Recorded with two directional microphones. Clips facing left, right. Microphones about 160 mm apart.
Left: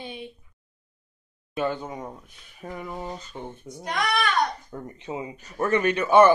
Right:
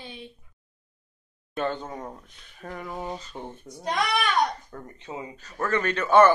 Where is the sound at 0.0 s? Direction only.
15° left (ahead or behind).